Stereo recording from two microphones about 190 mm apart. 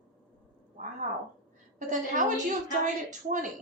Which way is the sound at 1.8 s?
40° right (ahead or behind).